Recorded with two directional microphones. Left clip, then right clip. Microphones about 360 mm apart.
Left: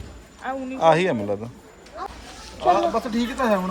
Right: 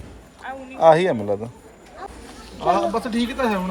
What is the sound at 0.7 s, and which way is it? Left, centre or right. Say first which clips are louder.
Speech: right 4 dB; centre.